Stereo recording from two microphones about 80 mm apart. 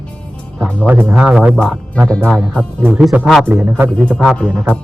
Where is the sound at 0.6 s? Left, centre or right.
Right.